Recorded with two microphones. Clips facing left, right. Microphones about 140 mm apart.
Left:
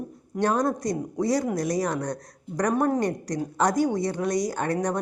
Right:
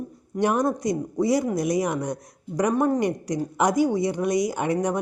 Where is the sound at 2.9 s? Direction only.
10° right (ahead or behind).